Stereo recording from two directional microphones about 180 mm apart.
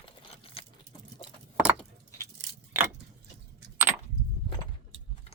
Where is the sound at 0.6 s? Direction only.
30° left (ahead or behind).